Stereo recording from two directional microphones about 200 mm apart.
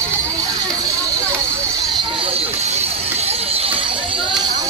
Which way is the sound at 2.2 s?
30° right (ahead or behind).